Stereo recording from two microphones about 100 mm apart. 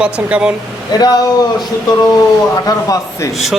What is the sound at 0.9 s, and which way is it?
Speech, 45° left (ahead or behind).